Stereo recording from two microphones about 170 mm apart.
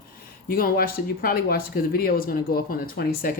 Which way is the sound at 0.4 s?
60° left (ahead or behind).